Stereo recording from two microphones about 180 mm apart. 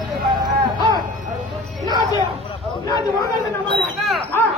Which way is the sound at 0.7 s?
25° right (ahead or behind).